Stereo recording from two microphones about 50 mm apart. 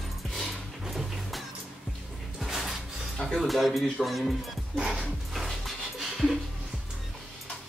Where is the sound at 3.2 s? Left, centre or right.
Centre.